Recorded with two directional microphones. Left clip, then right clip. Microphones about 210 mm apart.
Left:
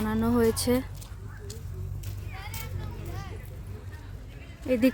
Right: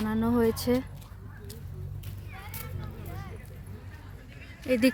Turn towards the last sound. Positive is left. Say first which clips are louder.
# even
turn(degrees=5)  # may be behind; listen again after turning